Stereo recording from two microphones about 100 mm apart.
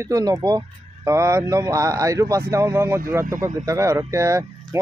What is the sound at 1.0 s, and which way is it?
Speech, 30° right (ahead or behind).